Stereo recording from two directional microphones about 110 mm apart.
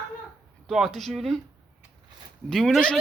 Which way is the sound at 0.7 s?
Centre (ahead or behind).